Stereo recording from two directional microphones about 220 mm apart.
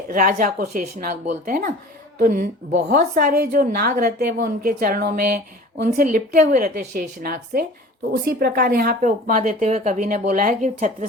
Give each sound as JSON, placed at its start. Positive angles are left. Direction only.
{"t": 0.1, "sound": "speech", "side_deg": -35}